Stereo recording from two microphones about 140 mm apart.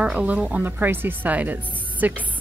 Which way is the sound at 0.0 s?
10° right (ahead or behind).